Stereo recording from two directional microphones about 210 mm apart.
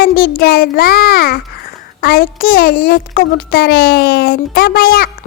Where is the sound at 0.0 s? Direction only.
45° left (ahead or behind).